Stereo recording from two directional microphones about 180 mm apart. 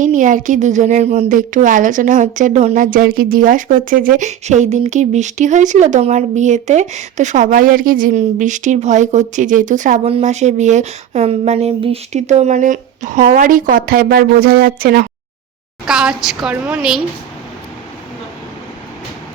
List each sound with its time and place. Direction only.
0.0 s a woman's voice: 45° right (ahead or behind)
15.9 s a woman's voice: 5° right (ahead or behind)